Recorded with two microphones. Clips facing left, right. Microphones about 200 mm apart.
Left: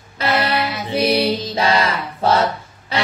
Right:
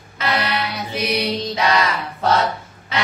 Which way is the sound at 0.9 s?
30° left (ahead or behind).